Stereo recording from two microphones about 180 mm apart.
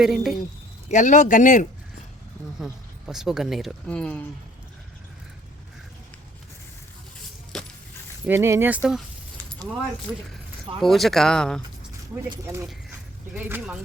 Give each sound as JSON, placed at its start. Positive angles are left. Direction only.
{"t": 0.0, "sound": "speech", "side_deg": 0}
{"t": 0.9, "sound": "speech", "side_deg": 45}
{"t": 2.6, "sound": "speech", "side_deg": 0}
{"t": 7.5, "sound": "keys jangling", "side_deg": 0}
{"t": 8.3, "sound": "speech", "side_deg": -15}
{"t": 10.8, "sound": "speech", "side_deg": 0}
{"t": 13.3, "sound": "speech", "side_deg": -10}